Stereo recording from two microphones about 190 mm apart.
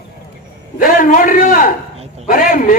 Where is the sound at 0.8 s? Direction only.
45° left (ahead or behind).